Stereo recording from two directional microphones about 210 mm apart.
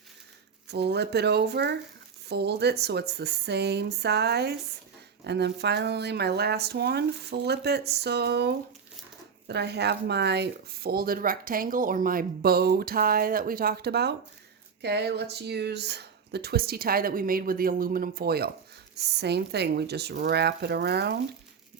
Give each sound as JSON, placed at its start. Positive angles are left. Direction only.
{"t": 0.7, "sound": "speech", "side_deg": -50}